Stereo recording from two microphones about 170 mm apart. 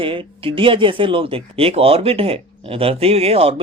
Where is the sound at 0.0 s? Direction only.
30° right (ahead or behind).